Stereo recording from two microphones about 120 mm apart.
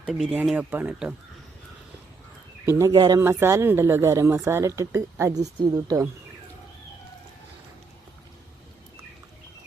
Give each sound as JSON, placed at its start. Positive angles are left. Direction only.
{"t": 0.0, "sound": "speech", "side_deg": 0}
{"t": 0.5, "sound": "speech", "side_deg": -15}
{"t": 2.6, "sound": "speech", "side_deg": -25}